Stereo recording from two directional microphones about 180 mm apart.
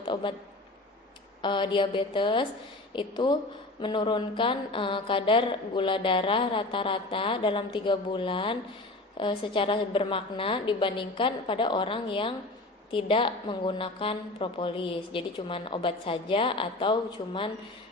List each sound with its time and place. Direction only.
0.1 s a man's voice: 25° left (ahead or behind)
1.4 s speech: 25° left (ahead or behind)